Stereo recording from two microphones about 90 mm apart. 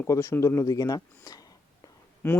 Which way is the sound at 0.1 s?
30° left (ahead or behind).